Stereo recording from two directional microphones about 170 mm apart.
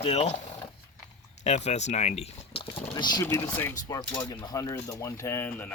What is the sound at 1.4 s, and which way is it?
Speech, 40° left (ahead or behind).